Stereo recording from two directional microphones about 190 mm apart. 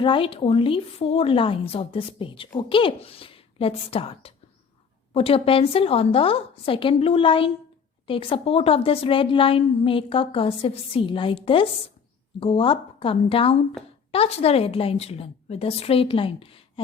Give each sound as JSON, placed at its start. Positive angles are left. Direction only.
{"t": 0.0, "sound": "a woman's voice", "side_deg": 25}